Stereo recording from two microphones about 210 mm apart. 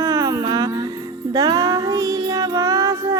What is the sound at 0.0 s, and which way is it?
Music, 15° right (ahead or behind).